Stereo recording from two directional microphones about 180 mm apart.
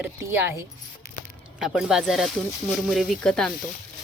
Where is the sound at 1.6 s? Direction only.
Centre (ahead or behind).